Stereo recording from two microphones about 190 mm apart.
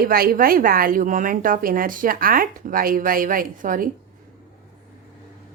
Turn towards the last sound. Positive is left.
turn(degrees=-45)  # may be behind; listen again after turning